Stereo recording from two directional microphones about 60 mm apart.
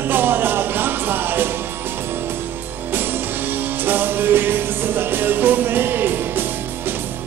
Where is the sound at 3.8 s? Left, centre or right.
Right.